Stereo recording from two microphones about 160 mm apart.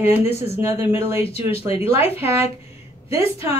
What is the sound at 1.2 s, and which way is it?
Speech, 40° left (ahead or behind).